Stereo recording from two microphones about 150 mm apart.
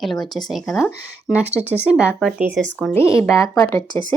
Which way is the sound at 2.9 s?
20° left (ahead or behind).